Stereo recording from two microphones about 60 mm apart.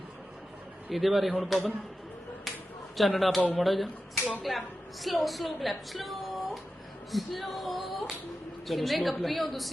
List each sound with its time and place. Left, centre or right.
0.9 s a woman's voice: centre
3.0 s a woman's voice: centre